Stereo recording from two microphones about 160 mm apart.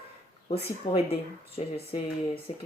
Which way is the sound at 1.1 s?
40° left (ahead or behind).